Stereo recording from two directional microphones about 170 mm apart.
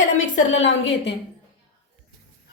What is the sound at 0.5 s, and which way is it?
Speech, 90° left.